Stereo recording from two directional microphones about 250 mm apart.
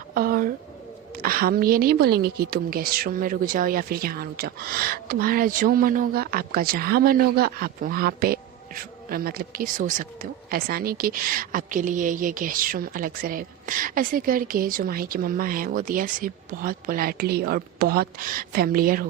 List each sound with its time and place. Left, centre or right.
0.1 s a woman's voice: right